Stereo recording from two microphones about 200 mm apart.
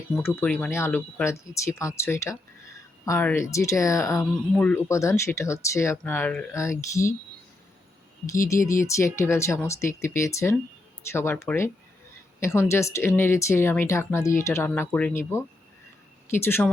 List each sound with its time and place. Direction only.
0.2 s speech: 10° left (ahead or behind)
8.4 s speech: 15° left (ahead or behind)
16.3 s speech: 10° left (ahead or behind)